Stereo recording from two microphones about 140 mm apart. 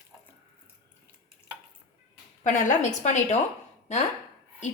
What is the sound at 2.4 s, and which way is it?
Speech, 65° left (ahead or behind).